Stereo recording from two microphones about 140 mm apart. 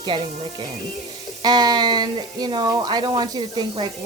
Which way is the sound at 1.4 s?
30° right (ahead or behind).